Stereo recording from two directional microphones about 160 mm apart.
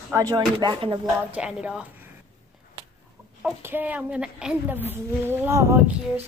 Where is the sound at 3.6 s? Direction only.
15° right (ahead or behind).